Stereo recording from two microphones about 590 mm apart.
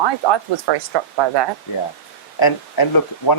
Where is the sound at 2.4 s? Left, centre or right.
Left.